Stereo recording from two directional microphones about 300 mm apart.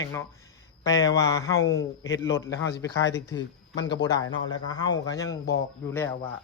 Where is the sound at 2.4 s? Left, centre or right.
Left.